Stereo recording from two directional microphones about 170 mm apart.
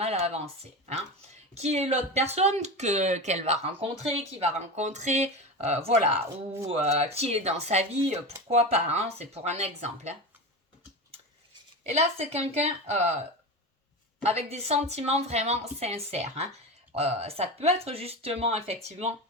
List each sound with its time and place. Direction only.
0.0 s a sound: 40° right (ahead or behind)
1.5 s speech: 40° right (ahead or behind)
11.9 s speech: 40° right (ahead or behind)
14.2 s a woman's voice: 40° right (ahead or behind)